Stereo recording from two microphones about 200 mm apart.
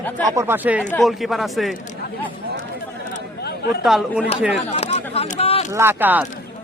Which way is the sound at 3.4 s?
55° left (ahead or behind).